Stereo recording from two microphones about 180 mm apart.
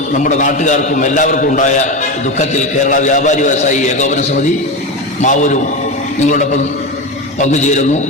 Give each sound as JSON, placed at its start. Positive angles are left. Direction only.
{"t": 0.1, "sound": "a man's voice", "side_deg": 45}